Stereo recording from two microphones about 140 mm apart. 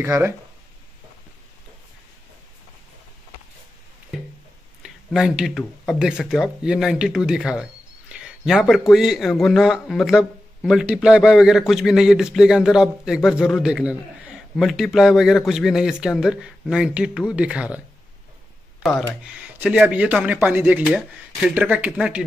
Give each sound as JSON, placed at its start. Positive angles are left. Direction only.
{"t": 0.0, "sound": "speech", "side_deg": -15}
{"t": 4.8, "sound": "a sound", "side_deg": -5}
{"t": 5.9, "sound": "a man's voice", "side_deg": -5}
{"t": 18.8, "sound": "speech", "side_deg": 0}
{"t": 19.3, "sound": "speech", "side_deg": -10}